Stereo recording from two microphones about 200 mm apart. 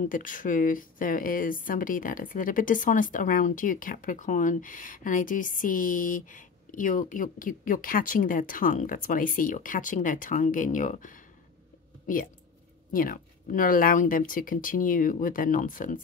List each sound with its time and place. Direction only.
0.1 s speech: 40° left (ahead or behind)
12.9 s speech: 45° left (ahead or behind)